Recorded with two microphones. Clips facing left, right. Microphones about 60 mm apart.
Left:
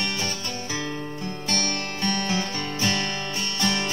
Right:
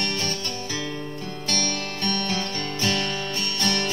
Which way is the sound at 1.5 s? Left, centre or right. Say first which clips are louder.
Even; centre.